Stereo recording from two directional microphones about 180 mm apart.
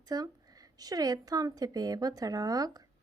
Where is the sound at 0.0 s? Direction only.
20° right (ahead or behind).